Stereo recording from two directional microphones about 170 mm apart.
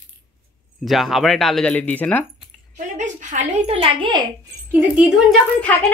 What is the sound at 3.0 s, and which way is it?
A woman's voice, 45° right (ahead or behind).